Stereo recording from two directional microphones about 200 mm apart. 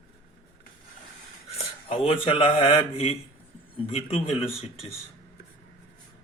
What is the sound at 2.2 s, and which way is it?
Speech, 25° left (ahead or behind).